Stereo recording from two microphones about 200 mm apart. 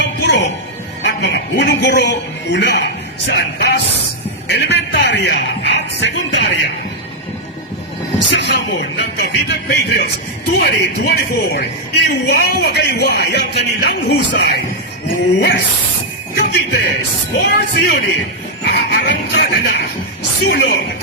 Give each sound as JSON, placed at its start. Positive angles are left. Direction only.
{"t": 0.0, "sound": "music", "side_deg": 60}
{"t": 1.0, "sound": "a man's voice", "side_deg": 60}
{"t": 8.3, "sound": "a man's voice", "side_deg": 60}